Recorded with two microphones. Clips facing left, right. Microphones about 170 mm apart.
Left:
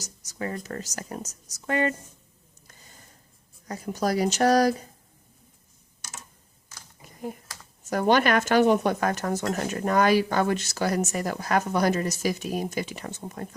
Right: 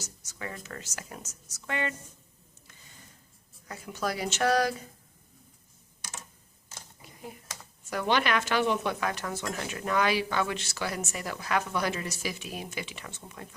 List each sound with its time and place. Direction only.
0.0 s a woman's voice: 40° left (ahead or behind)
2.6 s a sound: 45° left (ahead or behind)
3.7 s a woman's voice: 40° left (ahead or behind)
7.0 s typing: 45° left (ahead or behind)
7.9 s speech: 45° left (ahead or behind)